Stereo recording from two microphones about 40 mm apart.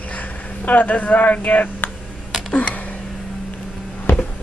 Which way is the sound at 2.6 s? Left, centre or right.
Left.